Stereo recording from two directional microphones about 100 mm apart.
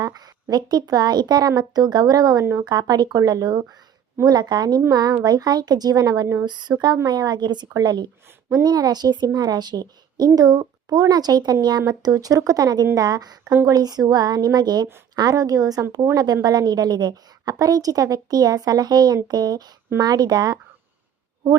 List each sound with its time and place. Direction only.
0.5 s a woman's voice: 40° right (ahead or behind)